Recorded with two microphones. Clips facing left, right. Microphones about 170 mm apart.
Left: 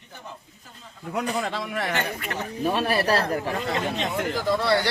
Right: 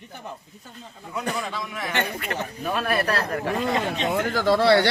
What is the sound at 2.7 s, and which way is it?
Speech, 30° left (ahead or behind).